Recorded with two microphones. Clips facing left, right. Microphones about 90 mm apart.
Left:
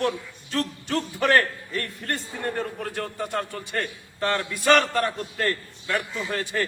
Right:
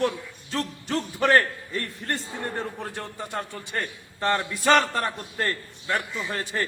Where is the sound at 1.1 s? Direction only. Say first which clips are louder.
Right 1 dB; 30° right (ahead or behind).